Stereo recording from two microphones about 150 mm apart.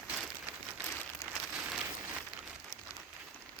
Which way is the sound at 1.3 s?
5° right (ahead or behind).